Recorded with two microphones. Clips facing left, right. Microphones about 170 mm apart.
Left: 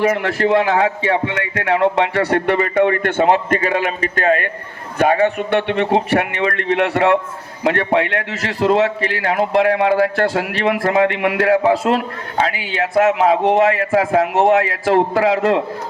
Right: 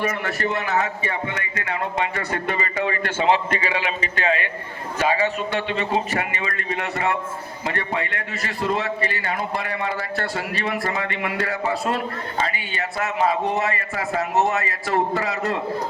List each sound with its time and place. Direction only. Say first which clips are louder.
0.0 s a man's voice: left 8 dB; 90° left